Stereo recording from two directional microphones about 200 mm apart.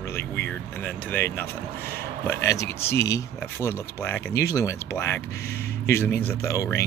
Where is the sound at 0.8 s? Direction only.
10° left (ahead or behind).